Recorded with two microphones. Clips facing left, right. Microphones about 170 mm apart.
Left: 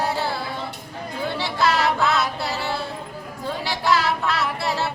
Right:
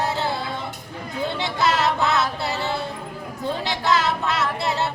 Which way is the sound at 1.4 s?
20° right (ahead or behind).